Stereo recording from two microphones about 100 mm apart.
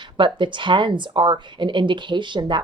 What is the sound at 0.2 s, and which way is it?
Speech, 55° right (ahead or behind).